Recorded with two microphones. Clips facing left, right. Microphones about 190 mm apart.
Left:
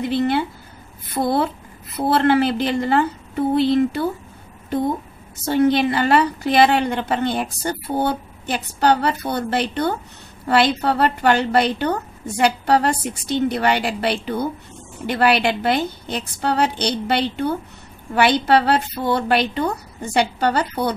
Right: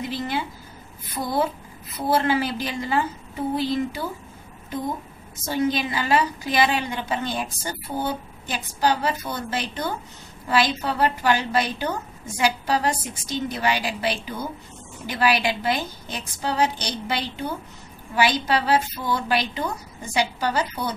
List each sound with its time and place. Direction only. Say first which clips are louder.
0.0 s a sound: left 8 dB; 65° left (ahead or behind)
1.0 s a woman's voice: left 5 dB; 65° left (ahead or behind)
5.4 s a woman's voice: left 7 dB; 65° left (ahead or behind)